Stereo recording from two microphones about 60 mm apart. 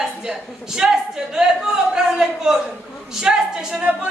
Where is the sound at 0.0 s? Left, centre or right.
Centre.